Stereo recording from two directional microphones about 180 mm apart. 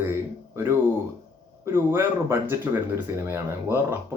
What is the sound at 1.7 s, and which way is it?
A man's voice, 15° right (ahead or behind).